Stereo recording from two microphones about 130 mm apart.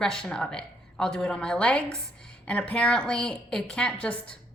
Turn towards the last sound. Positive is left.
turn(degrees=10)  # may be behind; listen again after turning